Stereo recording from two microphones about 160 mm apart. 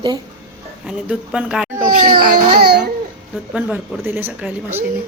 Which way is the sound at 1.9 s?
65° right (ahead or behind).